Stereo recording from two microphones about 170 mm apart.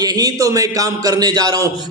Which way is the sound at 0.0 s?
20° right (ahead or behind).